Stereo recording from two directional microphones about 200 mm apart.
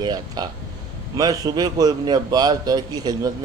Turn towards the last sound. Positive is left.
turn(degrees=-20)  # may be behind; listen again after turning